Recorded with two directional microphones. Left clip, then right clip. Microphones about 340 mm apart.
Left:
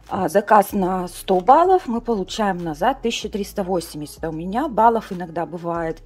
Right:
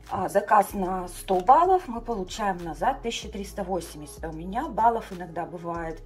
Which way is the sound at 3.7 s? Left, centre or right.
Centre.